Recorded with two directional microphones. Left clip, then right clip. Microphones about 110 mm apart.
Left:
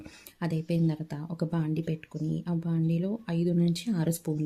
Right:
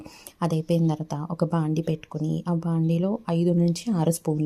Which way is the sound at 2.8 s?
20° right (ahead or behind).